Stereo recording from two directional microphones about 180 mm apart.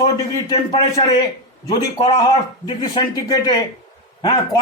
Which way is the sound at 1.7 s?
20° left (ahead or behind).